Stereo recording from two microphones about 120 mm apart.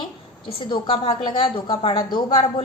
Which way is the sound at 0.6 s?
40° left (ahead or behind).